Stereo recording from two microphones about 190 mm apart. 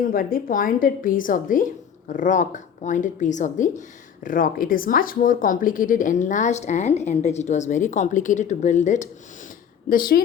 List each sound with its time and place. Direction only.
0.0 s a woman's voice: 50° left (ahead or behind)
9.9 s a woman's voice: 50° left (ahead or behind)